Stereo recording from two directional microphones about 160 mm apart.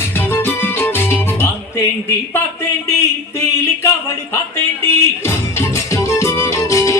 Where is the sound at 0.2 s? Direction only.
15° left (ahead or behind).